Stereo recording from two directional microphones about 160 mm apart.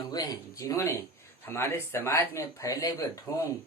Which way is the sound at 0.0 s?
25° left (ahead or behind).